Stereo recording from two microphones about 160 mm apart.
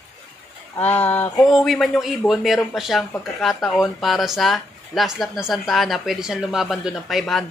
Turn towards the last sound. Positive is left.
turn(degrees=0)  # may be behind; listen again after turning